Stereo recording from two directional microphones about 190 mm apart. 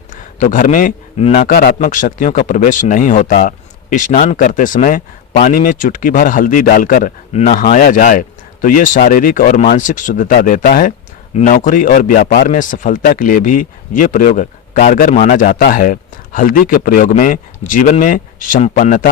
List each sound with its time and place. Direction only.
0.1 s speech: 45° left (ahead or behind)